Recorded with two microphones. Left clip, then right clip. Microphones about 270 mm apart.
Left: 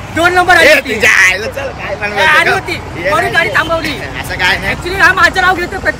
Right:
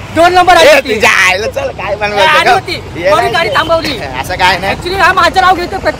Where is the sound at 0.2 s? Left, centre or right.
Right.